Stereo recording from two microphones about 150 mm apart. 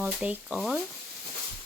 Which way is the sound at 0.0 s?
10° right (ahead or behind).